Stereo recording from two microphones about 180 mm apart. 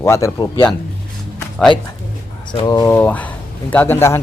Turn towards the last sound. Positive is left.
turn(degrees=15)  # may be behind; listen again after turning